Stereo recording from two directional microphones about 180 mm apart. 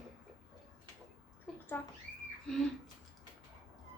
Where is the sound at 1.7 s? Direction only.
10° left (ahead or behind).